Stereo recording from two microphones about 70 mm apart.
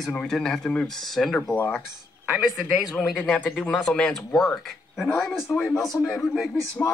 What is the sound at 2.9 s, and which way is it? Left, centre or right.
Speech, centre.